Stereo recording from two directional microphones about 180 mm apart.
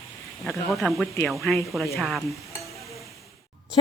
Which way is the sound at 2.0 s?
Centre (ahead or behind).